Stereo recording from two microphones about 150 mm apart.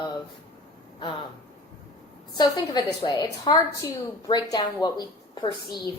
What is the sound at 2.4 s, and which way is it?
A woman's voice, 25° left (ahead or behind).